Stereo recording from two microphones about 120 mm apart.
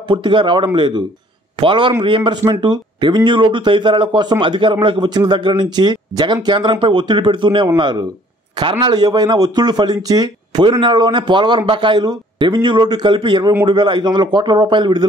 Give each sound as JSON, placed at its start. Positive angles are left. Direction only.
{"t": 0.1, "sound": "a man's voice", "side_deg": -45}